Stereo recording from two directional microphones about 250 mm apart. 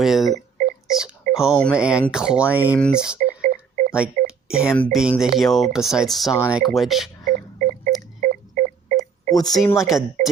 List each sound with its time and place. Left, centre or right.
0.0 s speech: centre
3.2 s telephone dialing: right
3.9 s a sound: centre
4.7 s speech: centre
7.3 s telephone dialing: right
9.3 s speech: centre
9.6 s speech: centre